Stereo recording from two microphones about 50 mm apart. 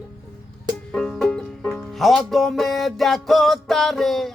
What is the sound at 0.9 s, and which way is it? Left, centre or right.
Music, centre.